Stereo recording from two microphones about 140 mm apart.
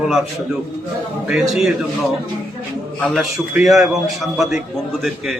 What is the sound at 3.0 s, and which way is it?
A man's voice, centre (ahead or behind).